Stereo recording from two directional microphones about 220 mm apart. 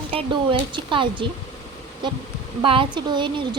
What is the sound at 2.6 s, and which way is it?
Speech, 25° right (ahead or behind).